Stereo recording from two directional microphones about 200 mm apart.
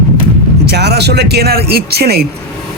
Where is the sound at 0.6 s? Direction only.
55° right (ahead or behind).